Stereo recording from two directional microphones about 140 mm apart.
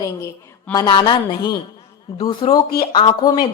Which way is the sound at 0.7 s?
30° left (ahead or behind).